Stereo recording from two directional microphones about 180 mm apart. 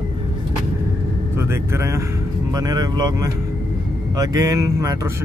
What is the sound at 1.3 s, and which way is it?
Speech, 15° right (ahead or behind).